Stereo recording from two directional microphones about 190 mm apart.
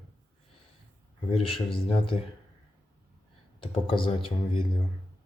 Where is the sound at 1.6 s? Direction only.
30° left (ahead or behind).